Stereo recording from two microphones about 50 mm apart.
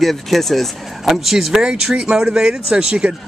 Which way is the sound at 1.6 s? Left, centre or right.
Centre.